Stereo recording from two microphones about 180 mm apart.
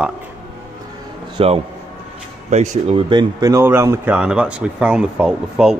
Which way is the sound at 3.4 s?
15° right (ahead or behind).